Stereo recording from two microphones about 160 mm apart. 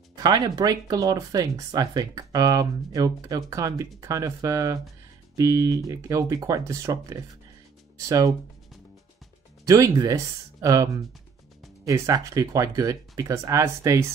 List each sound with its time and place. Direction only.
0.2 s speech: 25° right (ahead or behind)
9.7 s speech: 20° right (ahead or behind)